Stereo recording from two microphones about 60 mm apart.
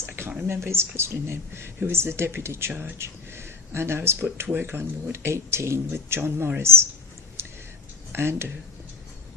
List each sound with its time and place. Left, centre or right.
0.0 s speech: right
7.4 s whispering: right
8.1 s speech: right